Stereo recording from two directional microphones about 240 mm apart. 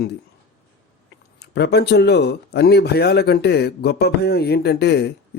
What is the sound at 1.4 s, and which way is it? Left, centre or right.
A man's voice, left.